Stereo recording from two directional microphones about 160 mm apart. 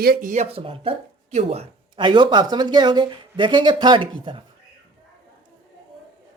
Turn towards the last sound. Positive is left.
turn(degrees=-30)  # may be behind; listen again after turning